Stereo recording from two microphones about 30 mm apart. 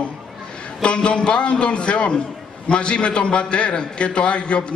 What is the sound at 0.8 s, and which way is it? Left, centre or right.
A man's voice, left.